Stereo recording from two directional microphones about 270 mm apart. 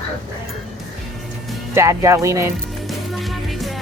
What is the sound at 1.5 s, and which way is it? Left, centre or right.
Speech, centre.